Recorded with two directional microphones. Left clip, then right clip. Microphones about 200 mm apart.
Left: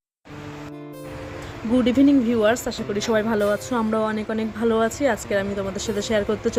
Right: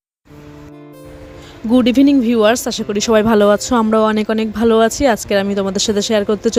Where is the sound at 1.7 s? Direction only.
50° right (ahead or behind).